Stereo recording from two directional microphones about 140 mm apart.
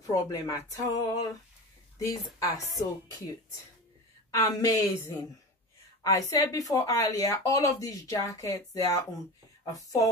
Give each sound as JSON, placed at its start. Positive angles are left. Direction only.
{"t": 0.0, "sound": "speech", "side_deg": 25}
{"t": 4.3, "sound": "speech", "side_deg": 25}